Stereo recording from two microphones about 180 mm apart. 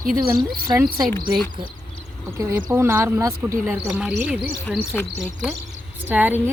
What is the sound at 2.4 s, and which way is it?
A woman's voice, 15° right (ahead or behind).